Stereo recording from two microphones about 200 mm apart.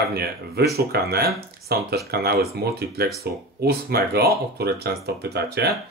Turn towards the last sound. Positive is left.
turn(degrees=-55)  # may be behind; listen again after turning